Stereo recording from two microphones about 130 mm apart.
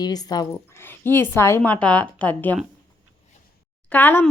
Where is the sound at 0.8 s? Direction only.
15° left (ahead or behind).